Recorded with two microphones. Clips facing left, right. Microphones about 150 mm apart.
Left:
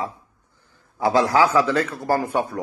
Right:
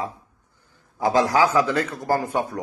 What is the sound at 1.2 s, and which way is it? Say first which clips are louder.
Speech: left 1 dB; 15° right (ahead or behind).